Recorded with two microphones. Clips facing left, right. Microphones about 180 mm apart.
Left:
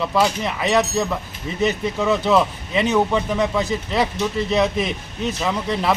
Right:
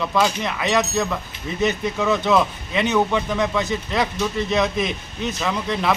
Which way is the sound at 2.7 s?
35° left (ahead or behind).